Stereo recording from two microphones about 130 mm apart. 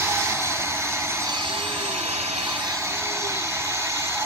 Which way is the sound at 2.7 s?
20° right (ahead or behind).